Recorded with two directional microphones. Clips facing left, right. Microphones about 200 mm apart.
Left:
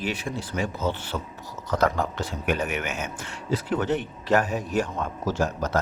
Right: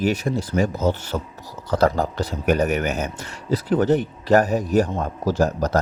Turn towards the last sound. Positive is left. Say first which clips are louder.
# right 6 dB
turn(degrees=-35)  # may be behind; listen again after turning